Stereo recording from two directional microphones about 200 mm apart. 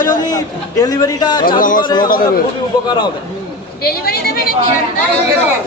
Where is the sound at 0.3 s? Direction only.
20° left (ahead or behind).